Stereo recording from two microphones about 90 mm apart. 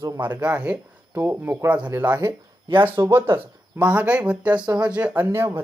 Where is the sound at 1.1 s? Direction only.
25° right (ahead or behind).